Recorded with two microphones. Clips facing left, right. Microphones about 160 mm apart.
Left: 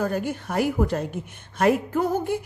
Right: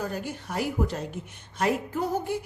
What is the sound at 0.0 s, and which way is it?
A woman's voice, 55° left (ahead or behind).